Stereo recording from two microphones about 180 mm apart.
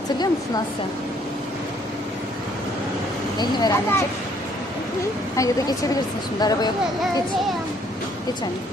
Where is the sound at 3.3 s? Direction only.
20° left (ahead or behind).